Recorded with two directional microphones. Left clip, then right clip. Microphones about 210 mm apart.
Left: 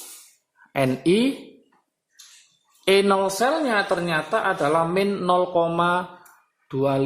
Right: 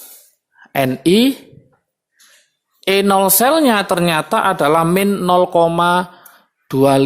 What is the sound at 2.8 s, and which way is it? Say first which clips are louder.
Speech: right 5 dB; 25° right (ahead or behind).